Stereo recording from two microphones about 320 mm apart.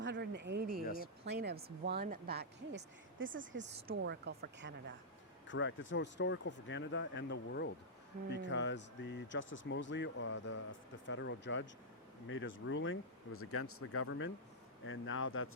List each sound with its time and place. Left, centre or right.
0.0 s speech: right
5.5 s speech: left